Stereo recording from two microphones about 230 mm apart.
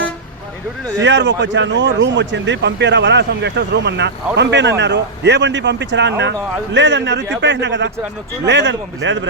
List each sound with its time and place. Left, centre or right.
1.0 s speech: right